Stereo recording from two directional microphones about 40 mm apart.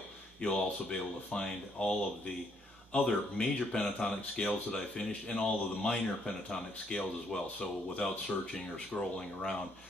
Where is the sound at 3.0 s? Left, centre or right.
Centre.